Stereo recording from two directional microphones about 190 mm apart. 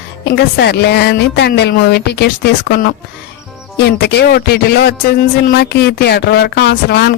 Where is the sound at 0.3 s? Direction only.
60° left (ahead or behind).